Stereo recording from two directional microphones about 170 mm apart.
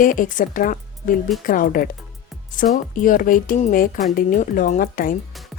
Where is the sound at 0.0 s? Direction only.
50° left (ahead or behind).